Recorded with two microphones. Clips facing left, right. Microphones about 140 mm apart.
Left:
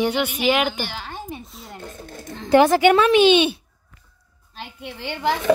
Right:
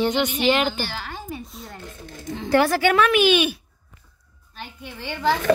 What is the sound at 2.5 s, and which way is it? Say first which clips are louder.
A woman's voice: left 5 dB; 20° left (ahead or behind).